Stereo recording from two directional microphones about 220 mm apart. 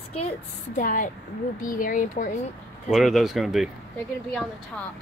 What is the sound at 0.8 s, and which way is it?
Speech, 40° left (ahead or behind).